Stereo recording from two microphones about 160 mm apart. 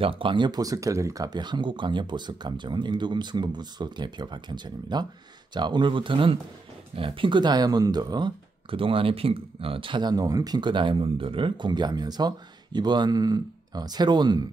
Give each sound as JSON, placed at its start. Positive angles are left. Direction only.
{"t": 0.0, "sound": "speech", "side_deg": -35}